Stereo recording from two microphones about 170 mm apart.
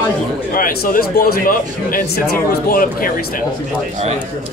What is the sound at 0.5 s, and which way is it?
Speech, 55° left (ahead or behind).